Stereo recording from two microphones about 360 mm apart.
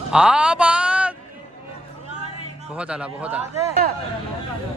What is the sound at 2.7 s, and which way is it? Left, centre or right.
Speech, centre.